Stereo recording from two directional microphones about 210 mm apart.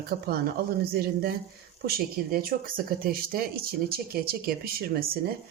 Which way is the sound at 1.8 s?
45° right (ahead or behind).